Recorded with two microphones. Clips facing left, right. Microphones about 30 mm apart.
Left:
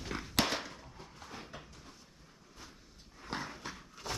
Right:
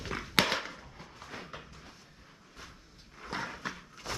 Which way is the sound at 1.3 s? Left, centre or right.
Right.